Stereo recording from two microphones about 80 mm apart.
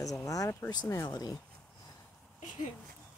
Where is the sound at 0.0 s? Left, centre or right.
Left.